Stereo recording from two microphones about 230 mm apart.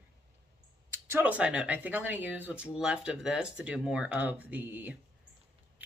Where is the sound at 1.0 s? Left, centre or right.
Centre.